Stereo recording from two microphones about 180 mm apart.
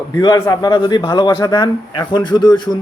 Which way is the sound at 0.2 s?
20° left (ahead or behind).